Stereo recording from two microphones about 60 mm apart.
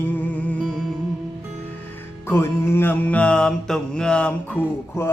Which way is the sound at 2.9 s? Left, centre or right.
Left.